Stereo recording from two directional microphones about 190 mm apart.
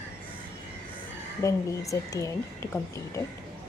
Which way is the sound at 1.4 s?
15° left (ahead or behind).